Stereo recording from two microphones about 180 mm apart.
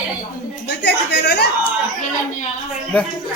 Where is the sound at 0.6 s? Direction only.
65° left (ahead or behind).